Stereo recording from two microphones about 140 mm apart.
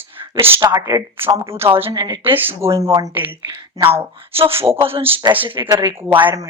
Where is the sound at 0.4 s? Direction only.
20° right (ahead or behind).